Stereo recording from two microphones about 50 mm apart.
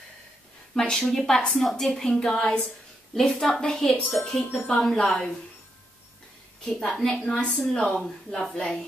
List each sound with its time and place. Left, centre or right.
0.7 s a woman's voice: centre
4.5 s speech: left
4.7 s a woman's voice: centre
6.6 s a woman's voice: centre